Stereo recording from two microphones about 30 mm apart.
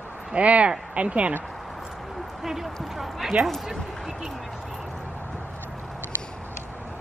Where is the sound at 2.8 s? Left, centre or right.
Centre.